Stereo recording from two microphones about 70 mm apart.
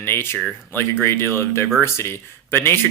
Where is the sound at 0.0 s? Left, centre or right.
Left.